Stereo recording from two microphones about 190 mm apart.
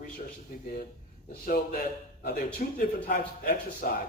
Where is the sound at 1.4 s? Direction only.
50° left (ahead or behind).